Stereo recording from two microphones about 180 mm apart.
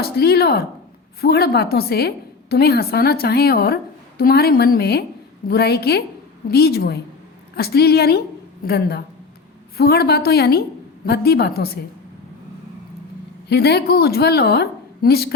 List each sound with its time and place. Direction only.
0.0 s a woman's voice: 60° left (ahead or behind)
13.5 s a woman's voice: 65° left (ahead or behind)